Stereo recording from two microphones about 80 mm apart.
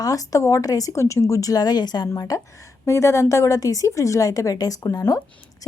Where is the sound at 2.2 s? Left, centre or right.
Left.